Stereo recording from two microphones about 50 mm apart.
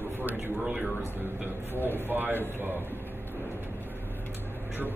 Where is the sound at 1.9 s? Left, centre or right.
Right.